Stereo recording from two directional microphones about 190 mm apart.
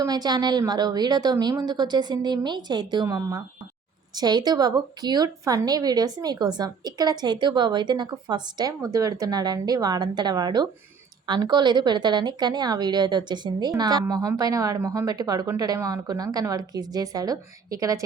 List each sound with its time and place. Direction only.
0.0 s a woman's voice: 20° right (ahead or behind)